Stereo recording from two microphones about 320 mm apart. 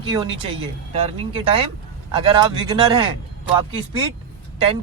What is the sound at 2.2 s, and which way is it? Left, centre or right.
Speech, centre.